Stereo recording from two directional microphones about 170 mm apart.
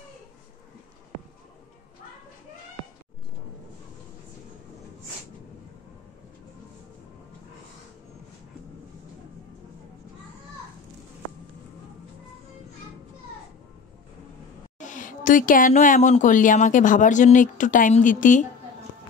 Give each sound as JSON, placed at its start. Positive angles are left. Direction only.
{"t": 14.8, "sound": "speech", "side_deg": 50}